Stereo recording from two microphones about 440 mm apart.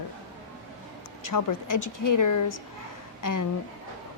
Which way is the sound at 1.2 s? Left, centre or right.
Left.